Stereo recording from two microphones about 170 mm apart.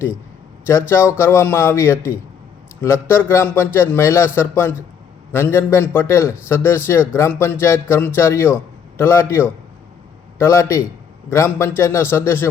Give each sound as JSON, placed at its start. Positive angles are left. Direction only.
{"t": 0.6, "sound": "a man's voice", "side_deg": 15}